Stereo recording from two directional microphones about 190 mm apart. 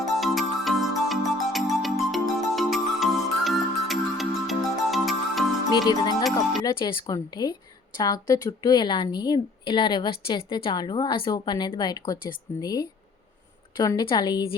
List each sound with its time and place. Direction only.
0.0 s music: centre (ahead or behind)
5.7 s speech: 20° left (ahead or behind)